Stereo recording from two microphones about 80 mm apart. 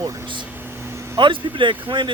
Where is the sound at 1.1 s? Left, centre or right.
Right.